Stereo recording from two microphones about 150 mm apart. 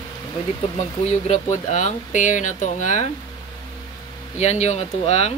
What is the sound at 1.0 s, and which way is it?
Speech, 45° left (ahead or behind).